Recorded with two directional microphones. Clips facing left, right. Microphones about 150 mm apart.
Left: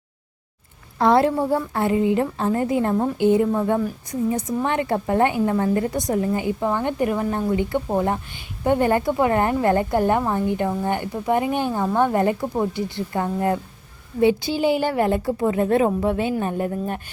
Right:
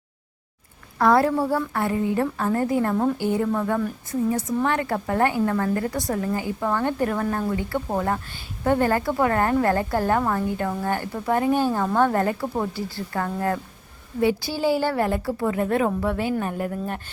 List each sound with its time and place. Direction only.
0.9 s a woman's voice: 25° left (ahead or behind)